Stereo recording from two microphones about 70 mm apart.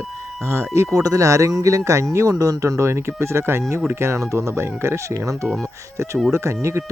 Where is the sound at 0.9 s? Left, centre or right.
Right.